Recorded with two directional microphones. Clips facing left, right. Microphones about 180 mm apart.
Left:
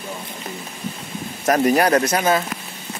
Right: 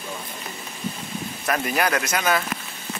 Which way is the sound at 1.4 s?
40° left (ahead or behind).